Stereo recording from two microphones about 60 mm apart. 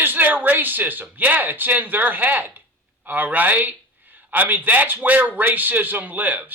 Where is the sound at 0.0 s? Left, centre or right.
Right.